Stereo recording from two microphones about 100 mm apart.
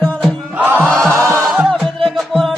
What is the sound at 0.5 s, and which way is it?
Music, 15° right (ahead or behind).